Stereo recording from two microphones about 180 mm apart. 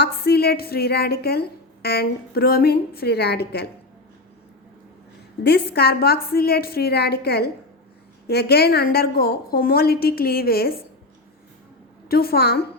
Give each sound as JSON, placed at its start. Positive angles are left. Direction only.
{"t": 0.0, "sound": "a woman's voice", "side_deg": 60}
{"t": 5.4, "sound": "a woman's voice", "side_deg": 65}
{"t": 12.0, "sound": "a woman's voice", "side_deg": 60}